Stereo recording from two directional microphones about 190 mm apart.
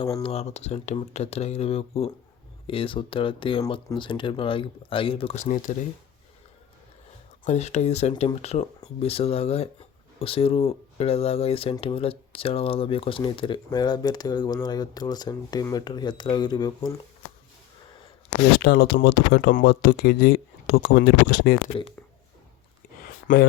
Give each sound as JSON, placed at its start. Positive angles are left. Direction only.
{"t": 0.0, "sound": "speech", "side_deg": 25}
{"t": 7.4, "sound": "speech", "side_deg": 35}
{"t": 18.5, "sound": "speech", "side_deg": 60}
{"t": 23.3, "sound": "speech", "side_deg": 45}